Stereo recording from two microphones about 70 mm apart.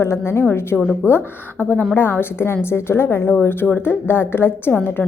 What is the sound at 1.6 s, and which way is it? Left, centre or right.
A woman's voice, left.